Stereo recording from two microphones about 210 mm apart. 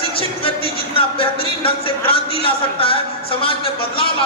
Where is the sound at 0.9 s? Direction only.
25° left (ahead or behind).